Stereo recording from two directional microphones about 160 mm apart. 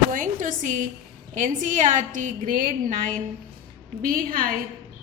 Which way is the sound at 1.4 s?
50° right (ahead or behind).